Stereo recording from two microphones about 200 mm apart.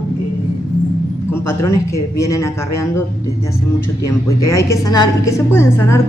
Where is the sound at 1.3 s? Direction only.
15° left (ahead or behind).